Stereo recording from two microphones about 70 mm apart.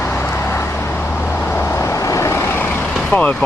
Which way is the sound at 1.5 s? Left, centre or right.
Left.